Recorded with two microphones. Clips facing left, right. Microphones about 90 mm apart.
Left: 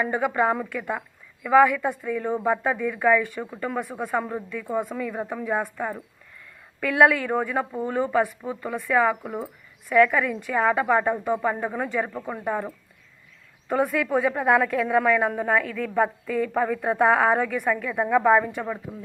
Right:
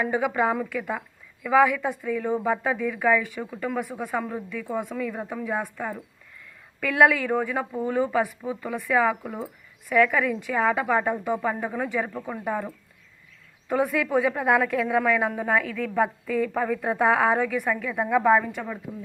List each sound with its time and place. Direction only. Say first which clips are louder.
0.0 s a woman's voice: left 1 dB; 5° right (ahead or behind)
9.2 s speech: left 2 dB; 10° left (ahead or behind)
9.9 s a woman's voice: left 2 dB; centre (ahead or behind)
18.9 s speech: right 1 dB; 15° left (ahead or behind)